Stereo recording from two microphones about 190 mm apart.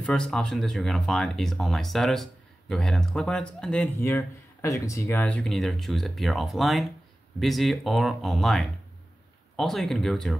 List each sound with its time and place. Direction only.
0.0 s speech: 5° left (ahead or behind)